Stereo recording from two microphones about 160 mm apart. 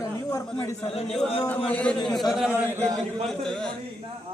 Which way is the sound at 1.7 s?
5° left (ahead or behind).